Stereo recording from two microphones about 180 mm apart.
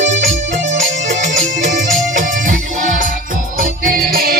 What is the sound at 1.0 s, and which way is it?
Music, 45° right (ahead or behind).